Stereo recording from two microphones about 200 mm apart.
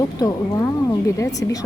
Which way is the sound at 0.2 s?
15° left (ahead or behind).